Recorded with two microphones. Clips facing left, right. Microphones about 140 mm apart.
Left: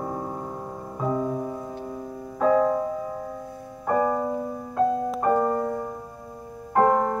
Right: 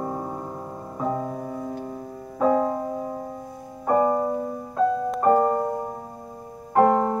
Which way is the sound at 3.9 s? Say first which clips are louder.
Right 3 dB; 20° right (ahead or behind).